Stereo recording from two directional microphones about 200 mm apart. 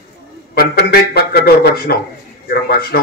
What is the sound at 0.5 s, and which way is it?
A man's voice, 50° left (ahead or behind).